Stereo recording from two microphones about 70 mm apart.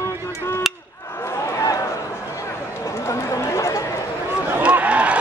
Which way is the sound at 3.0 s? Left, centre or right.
Left.